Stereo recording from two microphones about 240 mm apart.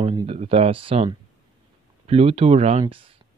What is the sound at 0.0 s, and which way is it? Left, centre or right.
Speech, right.